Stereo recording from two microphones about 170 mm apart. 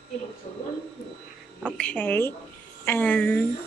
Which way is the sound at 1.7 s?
10° left (ahead or behind).